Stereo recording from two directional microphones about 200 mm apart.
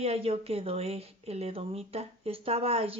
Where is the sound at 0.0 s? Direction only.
30° right (ahead or behind).